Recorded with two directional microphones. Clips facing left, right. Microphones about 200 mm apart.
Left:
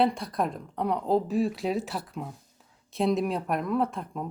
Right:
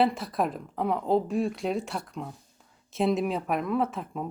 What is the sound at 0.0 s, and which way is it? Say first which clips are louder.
Speech: even; centre (ahead or behind).